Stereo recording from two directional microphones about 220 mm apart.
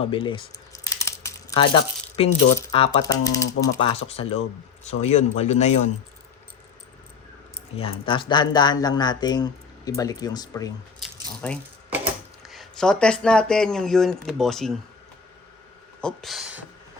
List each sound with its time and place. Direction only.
0.1 s speech: 25° left (ahead or behind)
0.9 s crumpling: 15° left (ahead or behind)
2.7 s speech: 20° left (ahead or behind)
7.8 s speech: 25° left (ahead or behind)
12.5 s speech: centre (ahead or behind)
16.0 s speech: centre (ahead or behind)